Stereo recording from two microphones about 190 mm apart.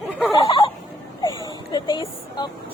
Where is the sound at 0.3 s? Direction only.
20° left (ahead or behind).